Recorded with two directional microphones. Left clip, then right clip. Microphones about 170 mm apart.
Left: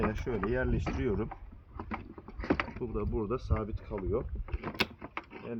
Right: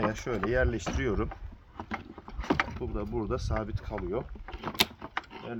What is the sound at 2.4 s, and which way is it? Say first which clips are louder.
Vehicle: right 3 dB; 10° left (ahead or behind).